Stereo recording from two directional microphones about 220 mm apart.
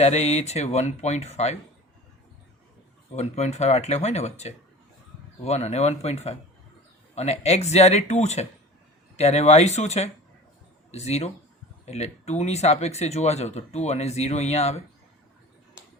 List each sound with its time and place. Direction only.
0.0 s speech: 30° left (ahead or behind)
3.2 s speech: 30° left (ahead or behind)